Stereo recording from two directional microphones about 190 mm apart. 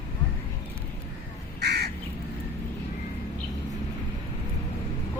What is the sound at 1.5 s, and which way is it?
Crow, 60° right (ahead or behind).